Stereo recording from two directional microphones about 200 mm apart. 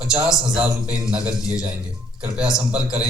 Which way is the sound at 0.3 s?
5° right (ahead or behind).